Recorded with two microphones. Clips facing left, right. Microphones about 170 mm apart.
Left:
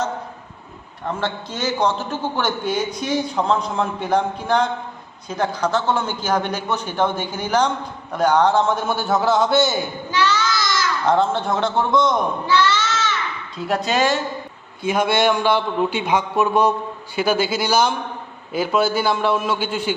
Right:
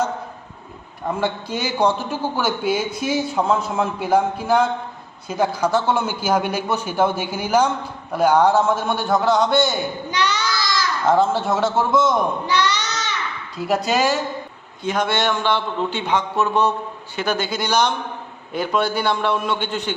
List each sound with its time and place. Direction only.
1.0 s a man's voice: 10° right (ahead or behind)
10.1 s child singing: 20° right (ahead or behind)
11.0 s a man's voice: 5° right (ahead or behind)
12.5 s baby cry: 15° right (ahead or behind)
13.7 s a man's voice: 10° right (ahead or behind)
14.8 s a man's voice: 10° left (ahead or behind)